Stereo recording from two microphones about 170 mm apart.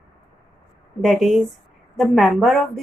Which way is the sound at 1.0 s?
Centre (ahead or behind).